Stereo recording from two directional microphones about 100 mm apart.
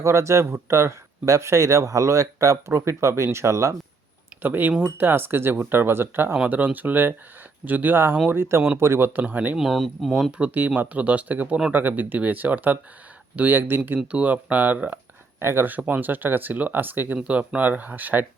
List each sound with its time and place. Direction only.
0.0 s speech: 30° right (ahead or behind)
4.4 s speech: 15° right (ahead or behind)
9.6 s speech: centre (ahead or behind)
10.3 s speech: 15° right (ahead or behind)